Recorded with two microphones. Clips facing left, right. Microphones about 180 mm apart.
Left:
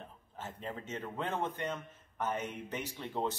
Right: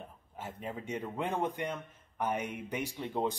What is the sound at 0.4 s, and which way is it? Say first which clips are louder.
A man's voice: right 2 dB; 10° right (ahead or behind).